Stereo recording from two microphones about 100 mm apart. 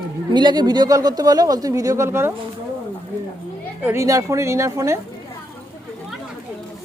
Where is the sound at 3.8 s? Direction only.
25° right (ahead or behind).